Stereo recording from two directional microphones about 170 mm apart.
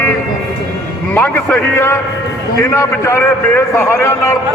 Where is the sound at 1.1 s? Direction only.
10° left (ahead or behind).